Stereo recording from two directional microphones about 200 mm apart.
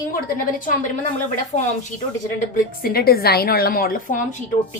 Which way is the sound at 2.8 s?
50° left (ahead or behind).